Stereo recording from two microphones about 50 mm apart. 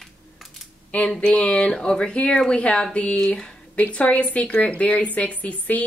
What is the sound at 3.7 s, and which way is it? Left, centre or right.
Speech, left.